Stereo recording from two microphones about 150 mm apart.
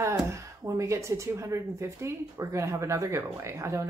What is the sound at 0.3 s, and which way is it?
Speech, 20° right (ahead or behind).